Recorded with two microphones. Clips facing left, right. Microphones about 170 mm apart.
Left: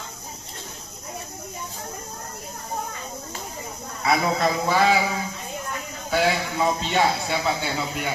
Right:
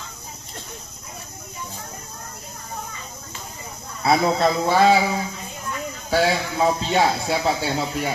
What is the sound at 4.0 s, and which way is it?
Speech, 30° right (ahead or behind).